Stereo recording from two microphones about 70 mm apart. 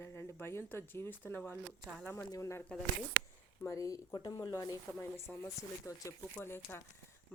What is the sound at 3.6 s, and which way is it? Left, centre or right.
Speech, left.